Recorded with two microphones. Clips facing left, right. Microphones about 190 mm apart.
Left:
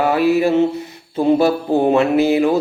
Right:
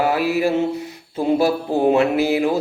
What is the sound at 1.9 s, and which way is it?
Speech, 10° right (ahead or behind).